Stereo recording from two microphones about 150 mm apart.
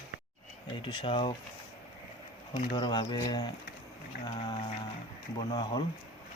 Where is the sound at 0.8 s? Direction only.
35° left (ahead or behind).